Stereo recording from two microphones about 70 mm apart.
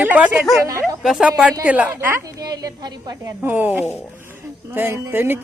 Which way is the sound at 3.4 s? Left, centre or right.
Right.